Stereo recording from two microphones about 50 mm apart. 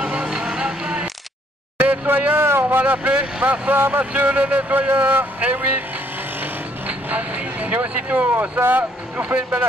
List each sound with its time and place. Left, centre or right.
0.0 s a sound: centre
1.8 s a sound: right
2.4 s vehicle: right
2.8 s speech: right
3.7 s speech: right
4.0 s speech: right
6.4 s vehicle: right
9.3 s speech: right